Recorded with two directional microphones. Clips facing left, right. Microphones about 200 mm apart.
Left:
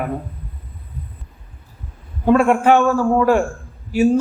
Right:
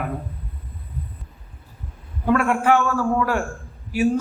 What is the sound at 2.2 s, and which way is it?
A man's voice, 25° left (ahead or behind).